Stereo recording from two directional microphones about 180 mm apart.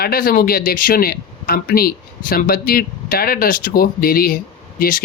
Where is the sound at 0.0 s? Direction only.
55° left (ahead or behind).